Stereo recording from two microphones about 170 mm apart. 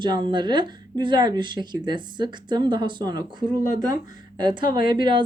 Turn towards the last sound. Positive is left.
turn(degrees=-25)  # may be behind; listen again after turning